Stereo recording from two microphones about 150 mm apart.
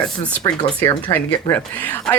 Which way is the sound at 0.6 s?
40° left (ahead or behind).